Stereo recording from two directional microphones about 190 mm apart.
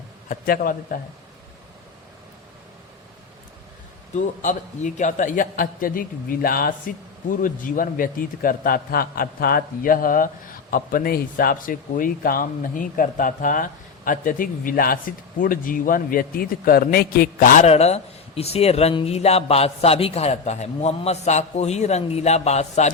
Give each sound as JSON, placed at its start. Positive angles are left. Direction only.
{"t": 0.3, "sound": "speech", "side_deg": 50}
{"t": 4.1, "sound": "speech", "side_deg": 40}